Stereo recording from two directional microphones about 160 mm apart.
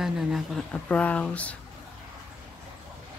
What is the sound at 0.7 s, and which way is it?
Speech, 10° left (ahead or behind).